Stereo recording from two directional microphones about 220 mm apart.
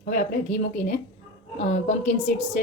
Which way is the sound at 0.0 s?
35° left (ahead or behind).